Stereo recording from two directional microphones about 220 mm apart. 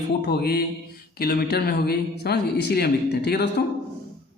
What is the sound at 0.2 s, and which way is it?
Speech, 45° left (ahead or behind).